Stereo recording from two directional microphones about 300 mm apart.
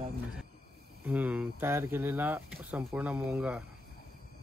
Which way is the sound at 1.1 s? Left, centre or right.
Centre.